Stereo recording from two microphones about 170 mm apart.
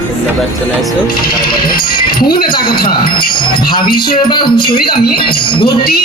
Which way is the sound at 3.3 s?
25° left (ahead or behind).